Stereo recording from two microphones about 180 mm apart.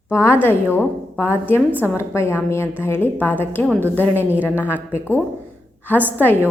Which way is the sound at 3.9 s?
10° left (ahead or behind).